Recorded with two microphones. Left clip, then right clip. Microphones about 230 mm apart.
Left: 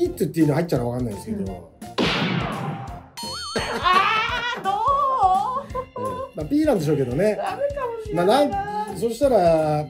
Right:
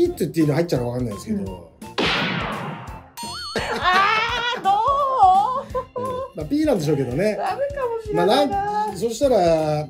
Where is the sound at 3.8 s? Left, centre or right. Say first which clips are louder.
Right 1 dB; right.